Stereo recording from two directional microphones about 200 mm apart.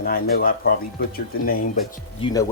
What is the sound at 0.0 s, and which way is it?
Speech, 50° left (ahead or behind).